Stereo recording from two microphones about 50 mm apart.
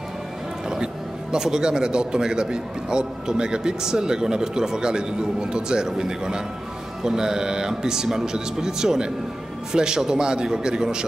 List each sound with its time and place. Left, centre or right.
1.3 s a man's voice: centre